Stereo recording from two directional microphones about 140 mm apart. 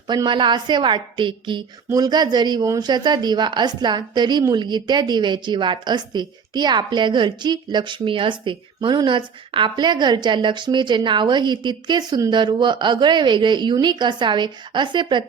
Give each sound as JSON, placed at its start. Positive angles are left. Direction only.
{"t": 0.1, "sound": "a woman's voice", "side_deg": -35}